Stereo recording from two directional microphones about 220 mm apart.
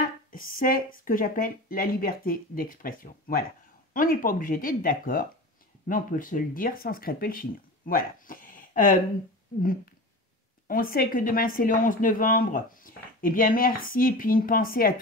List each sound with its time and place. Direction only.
0.3 s speech: 40° left (ahead or behind)
10.7 s speech: 40° left (ahead or behind)